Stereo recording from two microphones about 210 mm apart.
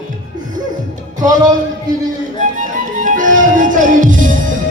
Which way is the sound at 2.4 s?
35° right (ahead or behind).